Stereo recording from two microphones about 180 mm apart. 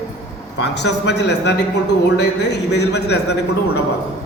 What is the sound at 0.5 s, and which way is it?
A man's voice, 70° left (ahead or behind).